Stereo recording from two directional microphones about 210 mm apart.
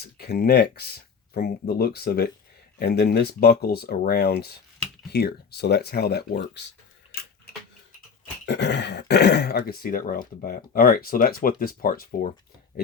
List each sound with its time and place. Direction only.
0.2 s speech: 50° left (ahead or behind)
8.4 s speech: 55° left (ahead or behind)